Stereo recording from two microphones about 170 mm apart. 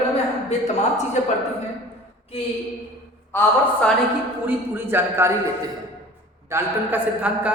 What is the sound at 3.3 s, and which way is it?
Speech, 5° left (ahead or behind).